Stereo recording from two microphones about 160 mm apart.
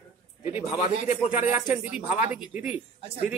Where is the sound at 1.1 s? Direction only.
45° left (ahead or behind).